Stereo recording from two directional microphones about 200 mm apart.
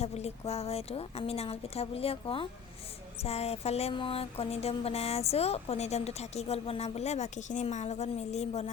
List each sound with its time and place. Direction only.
0.0 s mantra: 30° left (ahead or behind)